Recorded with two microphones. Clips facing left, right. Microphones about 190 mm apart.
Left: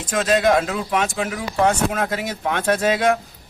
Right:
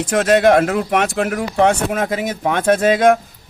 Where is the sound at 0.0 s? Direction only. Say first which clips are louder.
Right 5 dB; 60° right (ahead or behind).